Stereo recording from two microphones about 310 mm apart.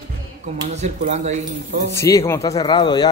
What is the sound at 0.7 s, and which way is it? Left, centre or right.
Speech, right.